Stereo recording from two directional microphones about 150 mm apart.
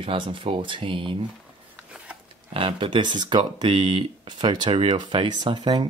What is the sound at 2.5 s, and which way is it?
Speech, 35° right (ahead or behind).